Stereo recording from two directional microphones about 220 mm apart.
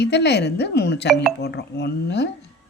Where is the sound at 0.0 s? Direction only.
50° left (ahead or behind).